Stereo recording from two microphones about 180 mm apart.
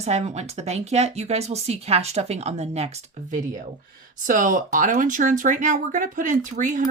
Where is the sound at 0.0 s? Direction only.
35° right (ahead or behind).